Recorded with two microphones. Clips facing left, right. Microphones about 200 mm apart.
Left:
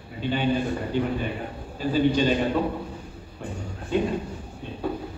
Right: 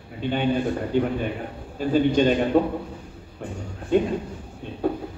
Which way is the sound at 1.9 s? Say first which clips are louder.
Right 2 dB; 55° right (ahead or behind).